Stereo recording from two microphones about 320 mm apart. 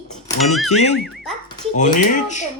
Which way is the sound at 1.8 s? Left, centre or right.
Left.